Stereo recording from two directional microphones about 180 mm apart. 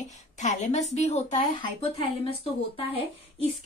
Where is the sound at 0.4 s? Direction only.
40° left (ahead or behind).